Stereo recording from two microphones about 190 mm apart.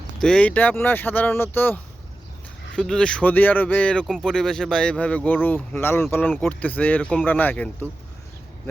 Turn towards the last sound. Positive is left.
turn(degrees=10)  # may be behind; listen again after turning